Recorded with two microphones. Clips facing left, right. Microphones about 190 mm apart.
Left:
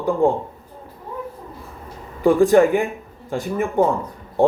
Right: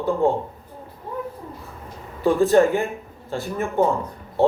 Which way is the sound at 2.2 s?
15° left (ahead or behind).